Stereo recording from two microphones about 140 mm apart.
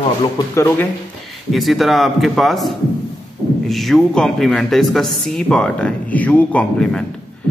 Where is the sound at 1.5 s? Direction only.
Centre (ahead or behind).